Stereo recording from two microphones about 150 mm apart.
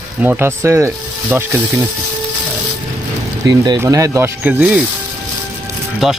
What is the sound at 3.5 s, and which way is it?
Speech, 25° right (ahead or behind).